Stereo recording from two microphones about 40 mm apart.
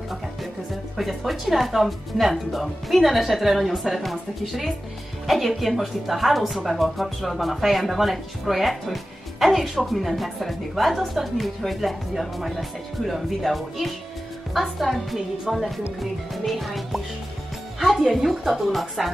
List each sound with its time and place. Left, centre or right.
0.9 s speech: centre
17.7 s music: centre
18.1 s speech: centre